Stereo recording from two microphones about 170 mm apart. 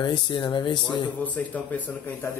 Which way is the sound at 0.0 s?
25° left (ahead or behind).